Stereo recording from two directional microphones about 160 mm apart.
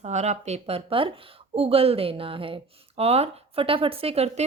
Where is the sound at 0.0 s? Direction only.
45° right (ahead or behind).